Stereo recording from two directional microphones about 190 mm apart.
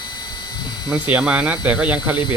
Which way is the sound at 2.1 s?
25° left (ahead or behind).